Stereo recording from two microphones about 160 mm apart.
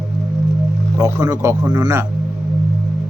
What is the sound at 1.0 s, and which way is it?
Speech, 20° right (ahead or behind).